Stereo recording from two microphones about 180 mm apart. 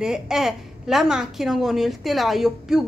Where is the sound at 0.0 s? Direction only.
5° right (ahead or behind).